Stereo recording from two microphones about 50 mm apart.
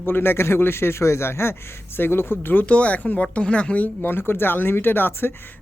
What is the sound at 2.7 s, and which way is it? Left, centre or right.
Speech, left.